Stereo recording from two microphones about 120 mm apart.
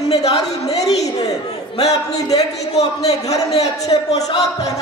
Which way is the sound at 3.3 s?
65° left (ahead or behind).